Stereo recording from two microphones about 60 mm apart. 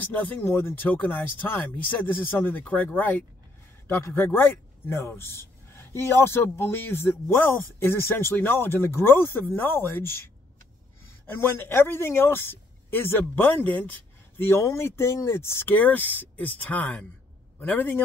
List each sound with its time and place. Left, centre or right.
0.0 s speech: left
0.5 s speech: left
11.3 s speech: left
14.5 s speech: left
15.7 s speech: left